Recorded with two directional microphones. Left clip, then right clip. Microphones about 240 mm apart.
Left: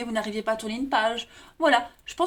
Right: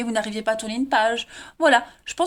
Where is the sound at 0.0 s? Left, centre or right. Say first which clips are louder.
Right 4 dB; right.